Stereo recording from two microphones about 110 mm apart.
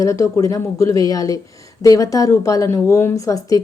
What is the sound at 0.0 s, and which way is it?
A woman's voice, 30° left (ahead or behind).